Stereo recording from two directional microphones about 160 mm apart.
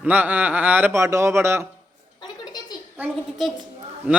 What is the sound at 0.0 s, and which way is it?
Speech, 10° right (ahead or behind).